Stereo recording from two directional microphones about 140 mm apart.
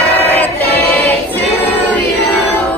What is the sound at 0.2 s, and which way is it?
Choir, 15° left (ahead or behind).